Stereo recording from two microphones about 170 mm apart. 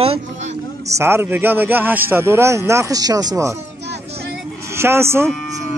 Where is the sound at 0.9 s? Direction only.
15° right (ahead or behind).